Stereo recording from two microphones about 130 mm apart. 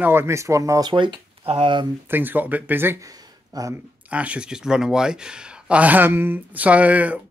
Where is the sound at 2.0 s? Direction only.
15° right (ahead or behind).